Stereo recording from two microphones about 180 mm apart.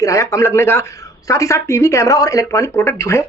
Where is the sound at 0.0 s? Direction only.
15° left (ahead or behind).